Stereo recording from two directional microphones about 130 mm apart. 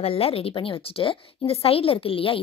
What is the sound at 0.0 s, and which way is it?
A woman's voice, 50° left (ahead or behind).